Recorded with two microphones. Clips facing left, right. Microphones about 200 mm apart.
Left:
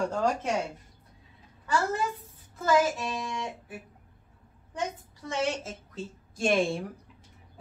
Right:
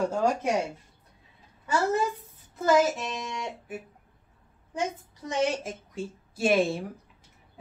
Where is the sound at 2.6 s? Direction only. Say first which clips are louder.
Right 2 dB; 20° right (ahead or behind).